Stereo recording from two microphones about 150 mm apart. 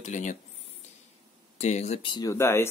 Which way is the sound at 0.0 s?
55° left (ahead or behind).